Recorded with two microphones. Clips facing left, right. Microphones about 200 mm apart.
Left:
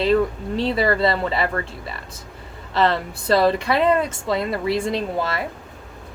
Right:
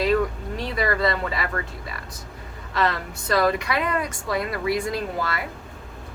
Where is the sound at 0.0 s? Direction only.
30° left (ahead or behind).